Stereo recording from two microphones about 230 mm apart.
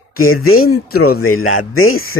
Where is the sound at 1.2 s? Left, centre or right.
Left.